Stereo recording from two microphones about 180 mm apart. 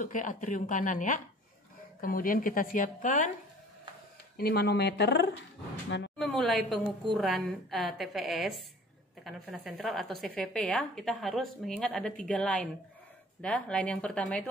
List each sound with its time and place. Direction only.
0.0 s speech: 45° left (ahead or behind)
4.4 s speech: 60° left (ahead or behind)
5.9 s a sound: 80° left
6.1 s a woman's voice: centre (ahead or behind)